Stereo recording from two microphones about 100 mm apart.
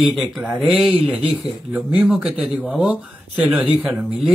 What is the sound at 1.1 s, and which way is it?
Speech, 10° right (ahead or behind).